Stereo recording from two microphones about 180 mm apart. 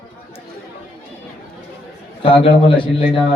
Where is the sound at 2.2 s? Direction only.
30° left (ahead or behind).